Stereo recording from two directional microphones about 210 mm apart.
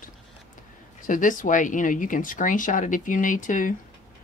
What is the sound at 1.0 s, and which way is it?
Speech, 40° left (ahead or behind).